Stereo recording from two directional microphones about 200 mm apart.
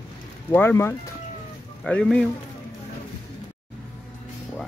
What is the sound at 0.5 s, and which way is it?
Speech, 10° left (ahead or behind).